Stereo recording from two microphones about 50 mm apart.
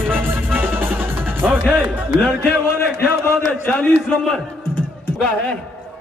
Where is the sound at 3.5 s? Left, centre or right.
Left.